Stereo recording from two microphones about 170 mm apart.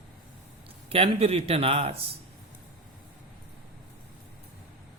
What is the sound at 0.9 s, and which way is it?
Speech, 35° right (ahead or behind).